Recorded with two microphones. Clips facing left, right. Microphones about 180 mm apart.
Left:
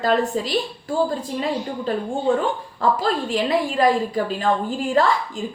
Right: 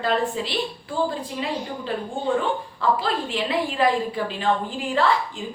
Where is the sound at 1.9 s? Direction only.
45° left (ahead or behind).